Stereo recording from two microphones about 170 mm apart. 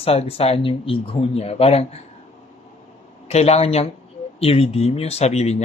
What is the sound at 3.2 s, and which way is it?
Speech, 40° left (ahead or behind).